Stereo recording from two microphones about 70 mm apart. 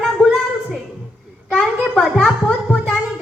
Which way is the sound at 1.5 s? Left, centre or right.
Centre.